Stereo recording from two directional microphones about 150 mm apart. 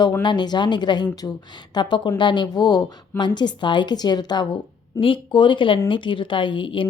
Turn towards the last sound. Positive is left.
turn(degrees=35)  # may be behind; listen again after turning